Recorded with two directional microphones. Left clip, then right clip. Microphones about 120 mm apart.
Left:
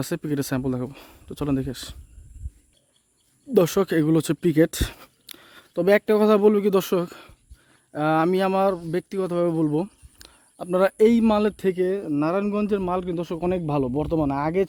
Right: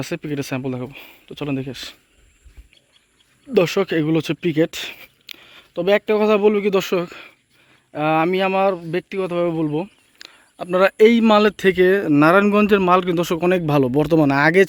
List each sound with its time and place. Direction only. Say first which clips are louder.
0.0 s speech: right 2 dB; 45° left (ahead or behind)
3.5 s speech: right 2 dB; 40° left (ahead or behind); by 6.0 s 55° left (ahead or behind)
6.0 s speech: right 2 dB; 45° left (ahead or behind)
10.3 s speech: right 4 dB; 25° left (ahead or behind)
11.3 s speech: right 7 dB; 5° left (ahead or behind)
11.8 s speech: right 9 dB; 15° right (ahead or behind)
13.4 s speech: right 6 dB; 5° right (ahead or behind)
13.9 s speech: right 8 dB; 20° right (ahead or behind)